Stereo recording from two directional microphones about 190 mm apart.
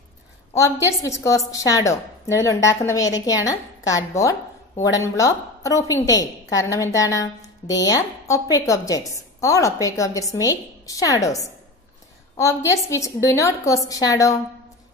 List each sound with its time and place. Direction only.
0.6 s a woman's voice: 15° left (ahead or behind)